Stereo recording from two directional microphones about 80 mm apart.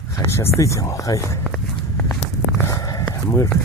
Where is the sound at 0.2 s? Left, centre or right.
Left.